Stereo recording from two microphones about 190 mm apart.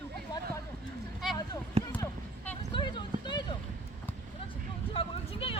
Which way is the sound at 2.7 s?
25° left (ahead or behind).